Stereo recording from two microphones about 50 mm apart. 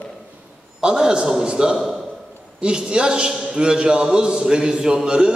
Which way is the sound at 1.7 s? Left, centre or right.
Centre.